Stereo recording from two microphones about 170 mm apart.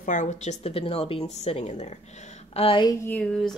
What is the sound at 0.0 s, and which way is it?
Speech, 45° left (ahead or behind).